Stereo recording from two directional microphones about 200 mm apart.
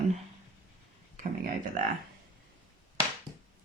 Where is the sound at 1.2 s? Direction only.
40° right (ahead or behind).